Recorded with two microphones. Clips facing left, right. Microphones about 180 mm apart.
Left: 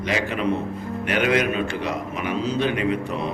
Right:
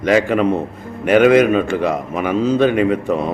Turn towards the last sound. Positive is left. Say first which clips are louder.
# right 8 dB
turn(degrees=-50)  # may be behind; listen again after turning